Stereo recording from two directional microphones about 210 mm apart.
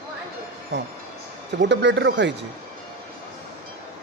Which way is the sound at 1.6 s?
55° right (ahead or behind).